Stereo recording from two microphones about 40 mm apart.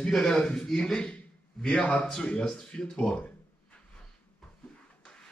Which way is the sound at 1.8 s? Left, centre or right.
Left.